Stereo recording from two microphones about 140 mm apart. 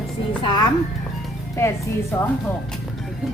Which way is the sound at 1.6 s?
20° left (ahead or behind).